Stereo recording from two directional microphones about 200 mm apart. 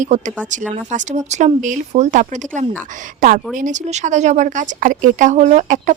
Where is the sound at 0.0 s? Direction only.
40° right (ahead or behind).